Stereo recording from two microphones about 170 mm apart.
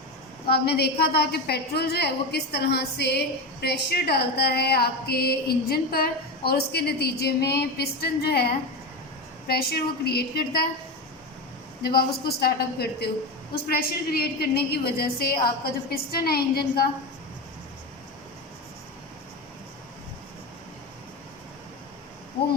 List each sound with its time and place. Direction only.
0.5 s a woman's voice: 75° left (ahead or behind)
11.8 s a woman's voice: 65° left (ahead or behind)